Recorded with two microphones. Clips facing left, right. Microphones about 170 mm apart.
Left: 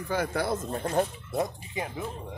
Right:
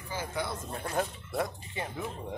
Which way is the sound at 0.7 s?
35° left (ahead or behind).